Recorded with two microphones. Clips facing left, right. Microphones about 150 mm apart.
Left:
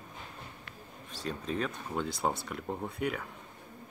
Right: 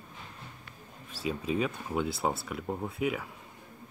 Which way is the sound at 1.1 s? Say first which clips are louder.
Right 4 dB; 5° right (ahead or behind).